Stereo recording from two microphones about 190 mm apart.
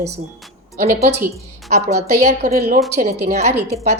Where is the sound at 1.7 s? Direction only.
35° right (ahead or behind).